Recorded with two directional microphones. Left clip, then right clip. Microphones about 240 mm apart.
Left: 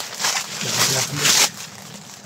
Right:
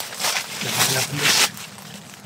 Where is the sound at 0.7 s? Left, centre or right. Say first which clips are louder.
Left 1 dB; centre.